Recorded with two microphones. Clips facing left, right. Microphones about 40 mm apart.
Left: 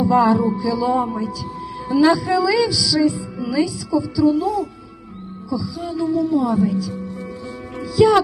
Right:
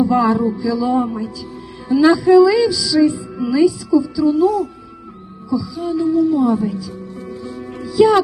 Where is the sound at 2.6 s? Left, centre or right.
Centre.